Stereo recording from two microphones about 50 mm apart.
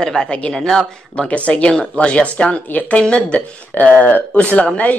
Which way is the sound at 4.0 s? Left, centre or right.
Left.